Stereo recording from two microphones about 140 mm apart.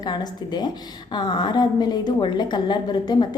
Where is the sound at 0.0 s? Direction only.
30° left (ahead or behind).